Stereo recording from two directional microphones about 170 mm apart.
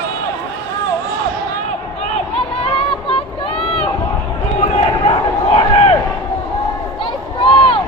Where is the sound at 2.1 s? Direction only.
35° left (ahead or behind).